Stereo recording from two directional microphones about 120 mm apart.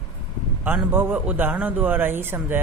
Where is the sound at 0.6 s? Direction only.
15° right (ahead or behind).